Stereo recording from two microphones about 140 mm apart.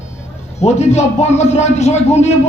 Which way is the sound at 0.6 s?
50° left (ahead or behind).